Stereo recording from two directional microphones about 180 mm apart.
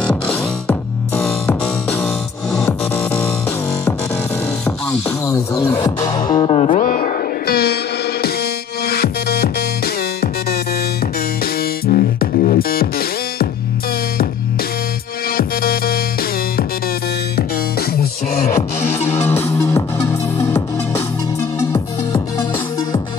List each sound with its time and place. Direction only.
0.0 s music: 5° left (ahead or behind)
1.9 s music: 10° left (ahead or behind)
3.2 s music: 15° left (ahead or behind)
5.2 s music: 15° left (ahead or behind); by 13.5 s 55° left (ahead or behind)
15.2 s music: 55° left (ahead or behind)
18.3 s music: 35° left (ahead or behind)
19.2 s music: 15° left (ahead or behind)